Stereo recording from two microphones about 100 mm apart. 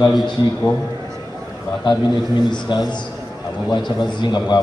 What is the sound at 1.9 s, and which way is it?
A man's voice, 50° left (ahead or behind).